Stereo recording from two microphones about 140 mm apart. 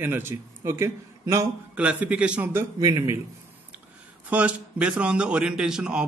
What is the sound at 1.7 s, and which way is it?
A man's voice, 10° right (ahead or behind).